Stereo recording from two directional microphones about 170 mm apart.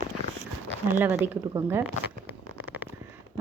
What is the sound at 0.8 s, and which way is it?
Speech, 15° right (ahead or behind).